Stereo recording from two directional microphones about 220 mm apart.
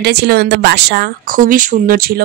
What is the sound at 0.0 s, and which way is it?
Speech, 45° right (ahead or behind).